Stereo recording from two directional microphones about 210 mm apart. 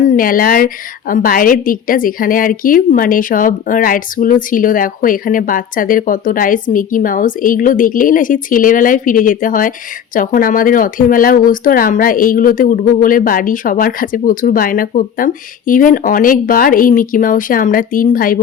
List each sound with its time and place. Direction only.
0.0 s a woman's voice: 40° left (ahead or behind)